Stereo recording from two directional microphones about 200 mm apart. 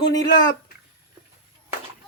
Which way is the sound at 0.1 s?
20° left (ahead or behind).